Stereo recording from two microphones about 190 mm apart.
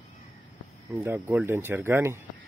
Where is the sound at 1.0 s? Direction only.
10° right (ahead or behind).